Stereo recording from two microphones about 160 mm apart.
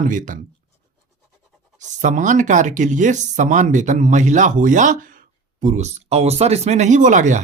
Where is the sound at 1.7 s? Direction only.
50° right (ahead or behind).